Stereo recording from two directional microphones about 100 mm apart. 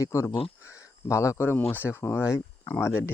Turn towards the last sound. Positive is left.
turn(degrees=25)  # may be behind; listen again after turning